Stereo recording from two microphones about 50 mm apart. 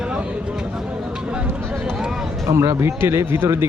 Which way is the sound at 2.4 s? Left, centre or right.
Right.